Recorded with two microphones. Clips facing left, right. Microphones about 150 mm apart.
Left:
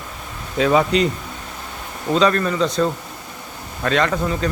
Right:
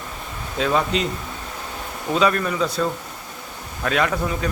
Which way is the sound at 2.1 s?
5° right (ahead or behind).